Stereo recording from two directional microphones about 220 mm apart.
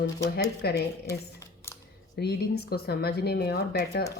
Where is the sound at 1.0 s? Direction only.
15° left (ahead or behind).